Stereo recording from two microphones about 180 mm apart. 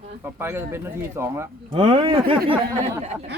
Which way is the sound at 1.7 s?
30° right (ahead or behind).